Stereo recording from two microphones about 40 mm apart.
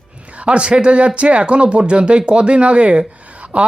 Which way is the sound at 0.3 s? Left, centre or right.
Right.